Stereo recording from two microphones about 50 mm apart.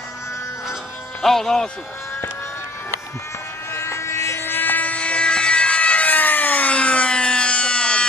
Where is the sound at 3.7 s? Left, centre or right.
Left; by 8.0 s centre.